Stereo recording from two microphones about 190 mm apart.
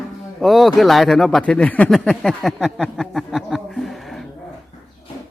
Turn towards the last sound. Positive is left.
turn(degrees=0)  # may be behind; listen again after turning